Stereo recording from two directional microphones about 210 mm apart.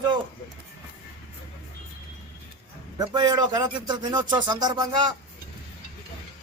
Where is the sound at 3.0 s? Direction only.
20° right (ahead or behind).